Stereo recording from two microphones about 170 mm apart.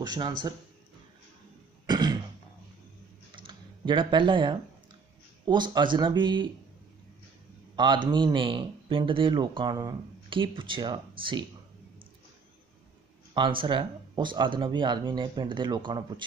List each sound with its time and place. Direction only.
0.0 s speech: 25° right (ahead or behind)
1.9 s throat clearing: 25° right (ahead or behind)
3.3 s computer keyboard: 30° right (ahead or behind)
5.4 s speech: 25° right (ahead or behind)
7.7 s speech: 25° right (ahead or behind)
13.3 s speech: 30° right (ahead or behind)